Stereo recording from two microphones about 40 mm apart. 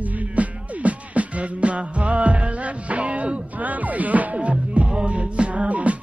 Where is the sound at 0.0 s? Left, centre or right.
Right.